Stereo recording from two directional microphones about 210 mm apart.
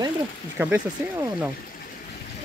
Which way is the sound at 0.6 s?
10° right (ahead or behind).